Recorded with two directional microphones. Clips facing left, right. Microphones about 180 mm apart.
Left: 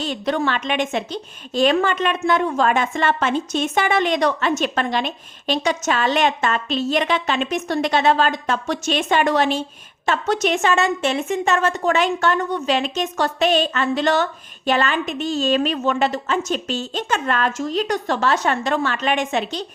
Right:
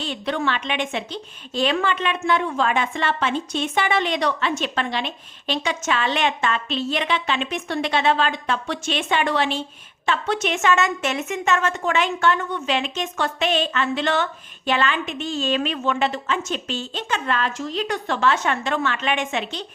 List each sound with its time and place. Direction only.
0.0 s a woman's voice: 40° left (ahead or behind)